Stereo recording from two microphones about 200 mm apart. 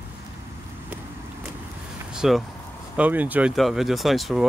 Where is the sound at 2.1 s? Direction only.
Centre (ahead or behind).